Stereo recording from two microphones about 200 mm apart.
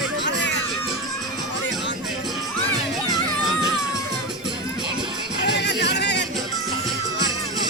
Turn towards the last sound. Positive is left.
turn(degrees=55)  # may be behind; listen again after turning